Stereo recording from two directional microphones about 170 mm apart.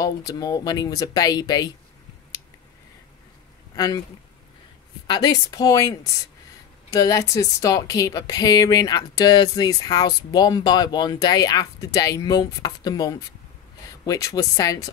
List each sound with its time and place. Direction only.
0.0 s speech: 20° left (ahead or behind)
3.7 s speech: 20° left (ahead or behind)
5.0 s speech: 25° left (ahead or behind)